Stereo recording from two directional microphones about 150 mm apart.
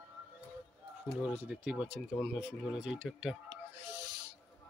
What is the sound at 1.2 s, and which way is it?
Speech, 10° right (ahead or behind).